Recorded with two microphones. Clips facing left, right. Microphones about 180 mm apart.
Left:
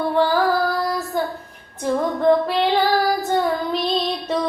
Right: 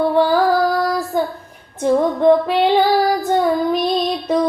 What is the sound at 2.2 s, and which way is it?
Female singing, 15° right (ahead or behind).